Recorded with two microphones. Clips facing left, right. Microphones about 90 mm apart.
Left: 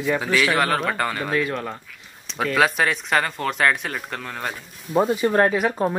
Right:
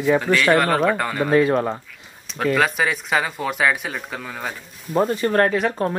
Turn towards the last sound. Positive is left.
turn(degrees=5)  # may be behind; listen again after turning